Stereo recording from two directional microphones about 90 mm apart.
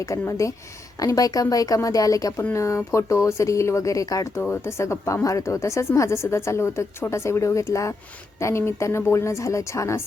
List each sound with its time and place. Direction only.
0.0 s speech: 35° left (ahead or behind)
4.4 s speech: 25° left (ahead or behind)